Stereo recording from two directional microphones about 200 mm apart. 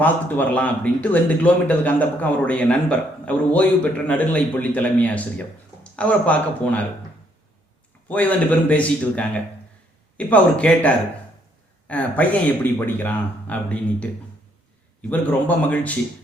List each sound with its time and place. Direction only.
0.0 s speech: 10° left (ahead or behind)
8.0 s speech: 10° left (ahead or behind)
15.1 s speech: 10° left (ahead or behind)